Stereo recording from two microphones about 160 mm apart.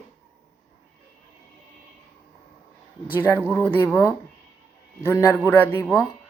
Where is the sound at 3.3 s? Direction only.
10° right (ahead or behind).